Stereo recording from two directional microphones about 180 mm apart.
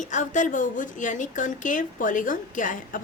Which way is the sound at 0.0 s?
45° left (ahead or behind).